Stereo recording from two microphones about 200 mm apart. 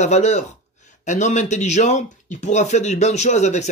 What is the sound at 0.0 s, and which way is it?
A man's voice, 35° left (ahead or behind).